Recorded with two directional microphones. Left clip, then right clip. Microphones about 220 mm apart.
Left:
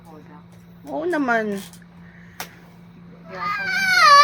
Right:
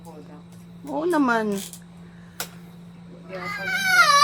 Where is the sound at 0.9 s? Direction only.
5° right (ahead or behind).